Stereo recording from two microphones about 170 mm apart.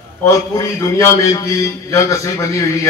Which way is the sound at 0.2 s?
20° left (ahead or behind).